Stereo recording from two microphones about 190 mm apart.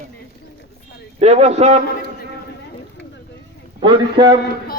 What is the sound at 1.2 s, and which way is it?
Speech, 35° right (ahead or behind).